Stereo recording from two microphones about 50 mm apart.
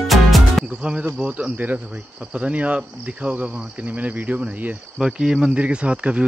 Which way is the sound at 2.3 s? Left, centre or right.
Right.